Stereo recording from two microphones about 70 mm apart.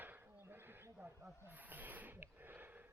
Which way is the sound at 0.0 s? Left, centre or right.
Right.